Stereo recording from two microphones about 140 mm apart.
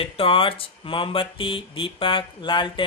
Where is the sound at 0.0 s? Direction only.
40° left (ahead or behind).